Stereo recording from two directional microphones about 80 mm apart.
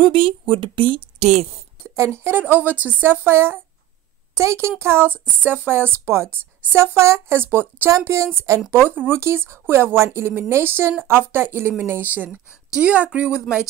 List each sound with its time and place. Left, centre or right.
0.0 s speech: right
2.0 s a woman's voice: right; by 13.4 s centre